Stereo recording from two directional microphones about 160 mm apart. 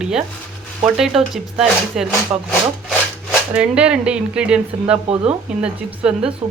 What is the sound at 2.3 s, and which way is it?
Speech, 15° right (ahead or behind).